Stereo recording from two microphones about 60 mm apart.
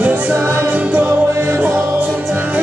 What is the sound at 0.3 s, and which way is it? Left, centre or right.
Music, right.